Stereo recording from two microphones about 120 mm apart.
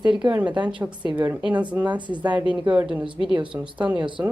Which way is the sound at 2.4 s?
40° right (ahead or behind).